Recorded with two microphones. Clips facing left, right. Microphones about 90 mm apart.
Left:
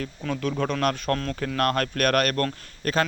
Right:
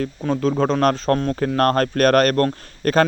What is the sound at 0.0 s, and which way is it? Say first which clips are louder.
Speech: right 8 dB; 35° right (ahead or behind).